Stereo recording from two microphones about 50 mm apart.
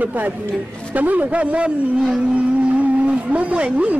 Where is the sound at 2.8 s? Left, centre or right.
Right.